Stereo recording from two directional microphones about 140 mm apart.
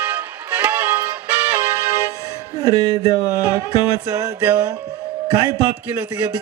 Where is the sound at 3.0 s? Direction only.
25° left (ahead or behind).